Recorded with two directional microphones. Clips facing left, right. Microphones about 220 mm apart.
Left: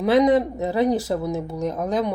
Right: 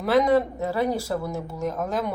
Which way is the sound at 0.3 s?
20° left (ahead or behind).